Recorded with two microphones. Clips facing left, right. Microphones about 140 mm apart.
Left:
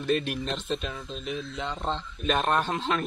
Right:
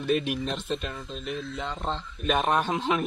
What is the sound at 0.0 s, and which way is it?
A man's voice, 5° right (ahead or behind).